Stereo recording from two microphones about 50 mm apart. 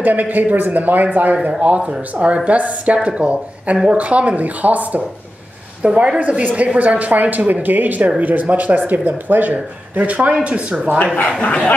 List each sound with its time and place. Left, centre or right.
0.0 s speech: right
1.3 s a woman's voice: right
5.8 s a woman's voice: right
11.4 s speech: left